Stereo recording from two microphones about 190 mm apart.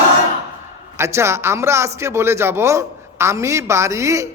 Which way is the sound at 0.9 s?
15° right (ahead or behind).